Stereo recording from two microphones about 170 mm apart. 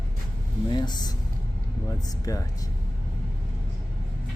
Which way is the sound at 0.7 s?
25° left (ahead or behind).